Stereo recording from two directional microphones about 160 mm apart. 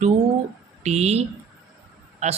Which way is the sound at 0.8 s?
45° right (ahead or behind).